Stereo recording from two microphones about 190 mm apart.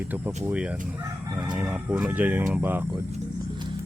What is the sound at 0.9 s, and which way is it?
Speech, 15° right (ahead or behind).